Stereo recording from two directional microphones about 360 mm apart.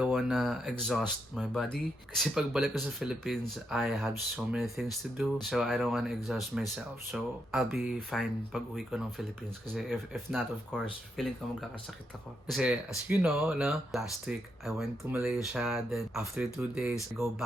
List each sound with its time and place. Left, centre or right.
0.0 s speech: centre
12.5 s speech: centre